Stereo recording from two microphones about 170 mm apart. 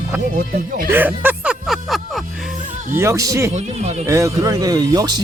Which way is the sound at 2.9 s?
15° right (ahead or behind).